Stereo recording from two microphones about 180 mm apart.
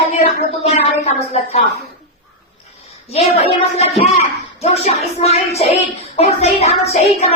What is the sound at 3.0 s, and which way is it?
Speech, 35° left (ahead or behind).